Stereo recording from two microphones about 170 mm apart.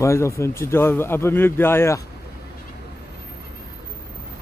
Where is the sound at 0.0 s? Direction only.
15° left (ahead or behind).